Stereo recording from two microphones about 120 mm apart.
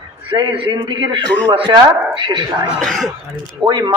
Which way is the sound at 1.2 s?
10° left (ahead or behind).